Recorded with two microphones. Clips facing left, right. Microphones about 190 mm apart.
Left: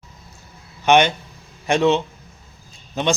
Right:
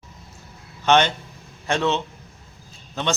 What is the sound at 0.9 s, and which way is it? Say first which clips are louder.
A man's voice: left 3 dB; 15° left (ahead or behind).